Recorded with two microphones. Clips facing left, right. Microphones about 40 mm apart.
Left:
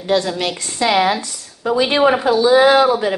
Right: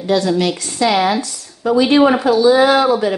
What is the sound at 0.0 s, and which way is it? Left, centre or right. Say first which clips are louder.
A woman's voice: right 3 dB; left.